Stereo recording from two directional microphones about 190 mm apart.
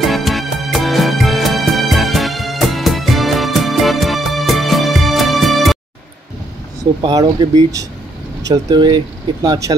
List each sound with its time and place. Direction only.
0.0 s music: centre (ahead or behind)
7.0 s speech: 25° right (ahead or behind)